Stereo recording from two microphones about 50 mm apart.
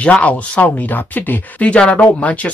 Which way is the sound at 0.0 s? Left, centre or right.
Left.